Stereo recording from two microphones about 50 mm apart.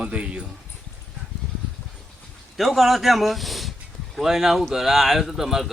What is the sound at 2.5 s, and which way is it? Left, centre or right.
Speech, centre.